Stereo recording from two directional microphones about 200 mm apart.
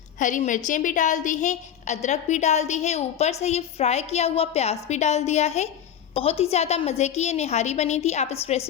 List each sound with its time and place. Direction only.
0.2 s a woman's voice: 40° left (ahead or behind)